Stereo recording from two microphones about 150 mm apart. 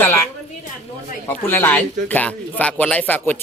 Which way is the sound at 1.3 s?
15° left (ahead or behind).